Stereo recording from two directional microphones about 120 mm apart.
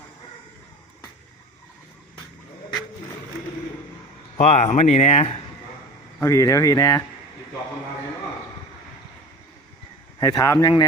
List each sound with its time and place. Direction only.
4.4 s speech: 65° left (ahead or behind)
6.1 s speech: 25° left (ahead or behind)
10.2 s a man's voice: 30° left (ahead or behind)